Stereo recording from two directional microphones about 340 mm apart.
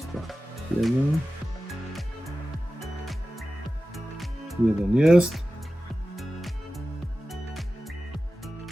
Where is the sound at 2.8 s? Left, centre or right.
Centre.